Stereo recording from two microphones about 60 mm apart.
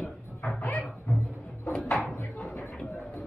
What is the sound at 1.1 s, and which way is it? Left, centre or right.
Music, left.